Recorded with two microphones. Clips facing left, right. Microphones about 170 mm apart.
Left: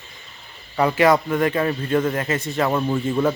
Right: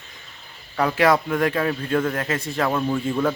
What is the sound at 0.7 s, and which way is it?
A man's voice, 5° left (ahead or behind).